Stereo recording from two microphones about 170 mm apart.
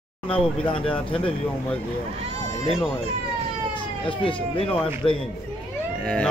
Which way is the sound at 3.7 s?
30° left (ahead or behind).